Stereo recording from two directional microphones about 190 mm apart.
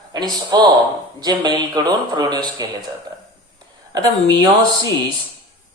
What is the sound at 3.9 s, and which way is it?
Speech, 20° right (ahead or behind).